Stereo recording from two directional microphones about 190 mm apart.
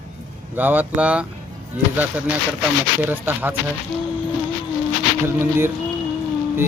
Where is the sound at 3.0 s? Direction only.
10° right (ahead or behind).